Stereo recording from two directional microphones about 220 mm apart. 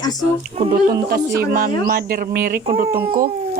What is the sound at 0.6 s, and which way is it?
Speech, 30° right (ahead or behind).